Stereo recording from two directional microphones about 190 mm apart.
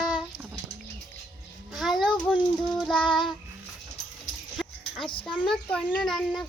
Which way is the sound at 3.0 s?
25° left (ahead or behind).